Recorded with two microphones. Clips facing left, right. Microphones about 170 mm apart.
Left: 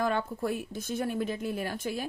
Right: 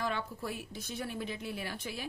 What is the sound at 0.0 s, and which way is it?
A woman's voice, 50° left (ahead or behind).